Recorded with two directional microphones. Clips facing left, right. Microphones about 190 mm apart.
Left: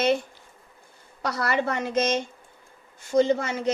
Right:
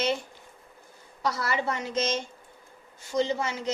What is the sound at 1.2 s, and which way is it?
A woman's voice, 60° left (ahead or behind).